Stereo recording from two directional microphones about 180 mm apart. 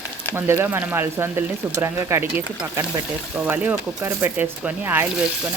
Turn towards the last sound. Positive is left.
turn(degrees=-10)  # may be behind; listen again after turning